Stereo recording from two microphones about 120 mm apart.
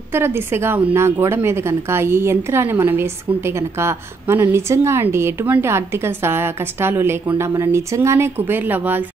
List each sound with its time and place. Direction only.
0.1 s a woman's voice: 20° right (ahead or behind)